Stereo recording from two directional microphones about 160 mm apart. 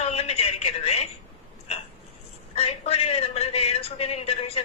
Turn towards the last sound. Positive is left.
turn(degrees=40)  # may be behind; listen again after turning